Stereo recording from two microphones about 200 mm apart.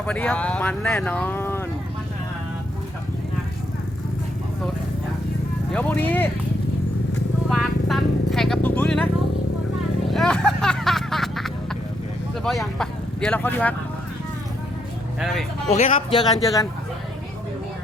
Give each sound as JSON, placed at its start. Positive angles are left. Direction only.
{"t": 0.0, "sound": "speech", "side_deg": 5}
{"t": 5.7, "sound": "speech", "side_deg": 10}
{"t": 7.5, "sound": "vehicle", "side_deg": 0}
{"t": 10.1, "sound": "hubbub", "side_deg": 0}
{"t": 12.5, "sound": "speech", "side_deg": 0}
{"t": 15.2, "sound": "speech", "side_deg": 0}
{"t": 15.7, "sound": "speech", "side_deg": 35}
{"t": 16.1, "sound": "speech", "side_deg": 20}